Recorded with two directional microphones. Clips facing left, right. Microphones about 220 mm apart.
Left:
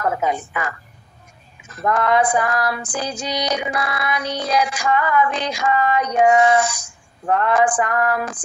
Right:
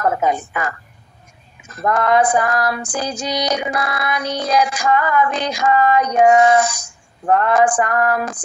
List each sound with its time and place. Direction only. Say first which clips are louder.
0.0 s female singing: right 3 dB; 45° right (ahead or behind)